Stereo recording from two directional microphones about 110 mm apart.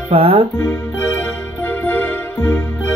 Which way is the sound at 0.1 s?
55° right (ahead or behind).